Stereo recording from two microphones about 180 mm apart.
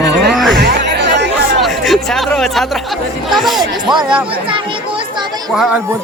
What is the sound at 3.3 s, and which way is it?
Speech, centre (ahead or behind).